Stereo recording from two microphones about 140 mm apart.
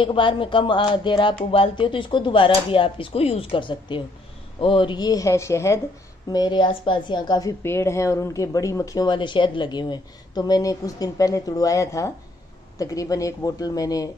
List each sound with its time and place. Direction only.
0.0 s speech: 35° left (ahead or behind); by 5.8 s 20° left (ahead or behind)
6.3 s speech: 30° left (ahead or behind)
7.6 s speech: 20° left (ahead or behind)